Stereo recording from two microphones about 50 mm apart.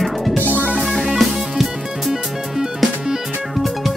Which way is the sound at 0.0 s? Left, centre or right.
Centre.